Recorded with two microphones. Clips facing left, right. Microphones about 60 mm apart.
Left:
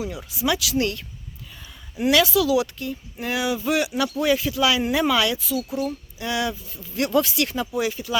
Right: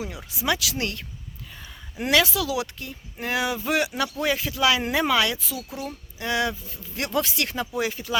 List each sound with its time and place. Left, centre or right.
0.0 s speech: right